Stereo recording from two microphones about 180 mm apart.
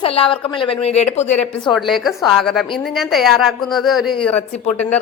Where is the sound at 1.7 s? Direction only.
Centre (ahead or behind).